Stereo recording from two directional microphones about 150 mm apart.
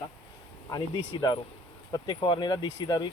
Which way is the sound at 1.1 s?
30° left (ahead or behind).